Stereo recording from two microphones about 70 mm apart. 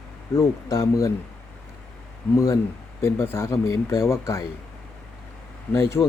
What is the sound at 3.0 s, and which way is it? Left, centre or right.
Speech, left.